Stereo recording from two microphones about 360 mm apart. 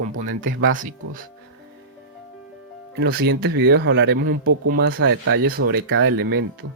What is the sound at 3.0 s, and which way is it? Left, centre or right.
Speech, right.